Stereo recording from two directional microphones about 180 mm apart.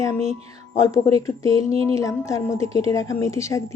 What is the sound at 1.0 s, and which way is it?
Stir, 20° left (ahead or behind).